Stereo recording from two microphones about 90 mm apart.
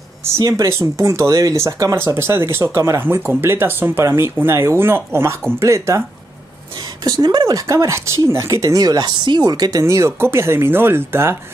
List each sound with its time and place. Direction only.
0.4 s speech: 45° right (ahead or behind)
0.7 s speech: 30° right (ahead or behind)
7.1 s speech: 50° right (ahead or behind); by 11.3 s 25° right (ahead or behind)